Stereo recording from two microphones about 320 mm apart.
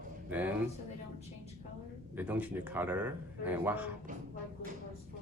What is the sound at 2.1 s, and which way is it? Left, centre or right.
A man's voice, centre.